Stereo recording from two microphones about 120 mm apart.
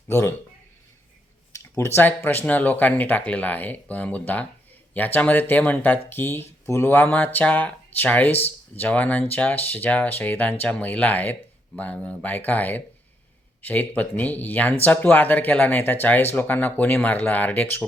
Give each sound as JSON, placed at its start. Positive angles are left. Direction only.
{"t": 0.1, "sound": "speech", "side_deg": 20}
{"t": 1.5, "sound": "a sound", "side_deg": 25}
{"t": 2.0, "sound": "speech", "side_deg": 15}